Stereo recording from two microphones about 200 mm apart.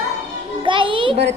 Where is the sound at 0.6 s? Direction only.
25° right (ahead or behind).